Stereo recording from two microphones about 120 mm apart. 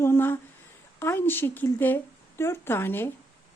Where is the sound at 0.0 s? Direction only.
20° left (ahead or behind).